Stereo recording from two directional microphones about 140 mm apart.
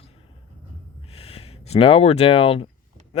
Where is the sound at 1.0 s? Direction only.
45° left (ahead or behind).